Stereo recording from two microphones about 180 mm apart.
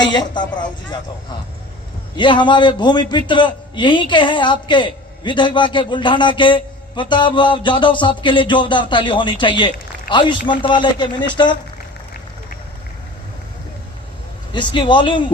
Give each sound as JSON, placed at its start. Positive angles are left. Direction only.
{"t": 0.0, "sound": "a man's voice", "side_deg": 25}
{"t": 2.1, "sound": "a man's voice", "side_deg": 25}
{"t": 14.5, "sound": "a man's voice", "side_deg": 25}